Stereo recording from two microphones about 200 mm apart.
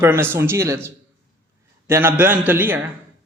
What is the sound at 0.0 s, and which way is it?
A man's voice, 10° right (ahead or behind).